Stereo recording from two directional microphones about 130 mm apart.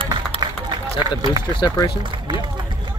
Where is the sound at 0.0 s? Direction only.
40° right (ahead or behind).